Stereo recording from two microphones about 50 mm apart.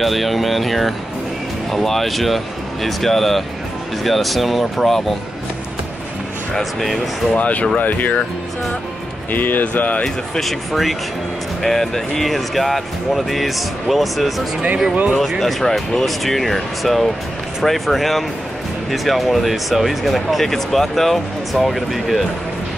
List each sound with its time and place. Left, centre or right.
0.0 s speech: centre
6.6 s speech: centre
7.3 s speech: left
9.3 s speech: left
10.0 s speech: centre
10.7 s speech: centre